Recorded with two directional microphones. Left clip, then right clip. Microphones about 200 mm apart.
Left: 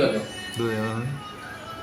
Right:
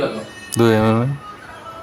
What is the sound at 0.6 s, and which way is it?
Speech, 55° right (ahead or behind).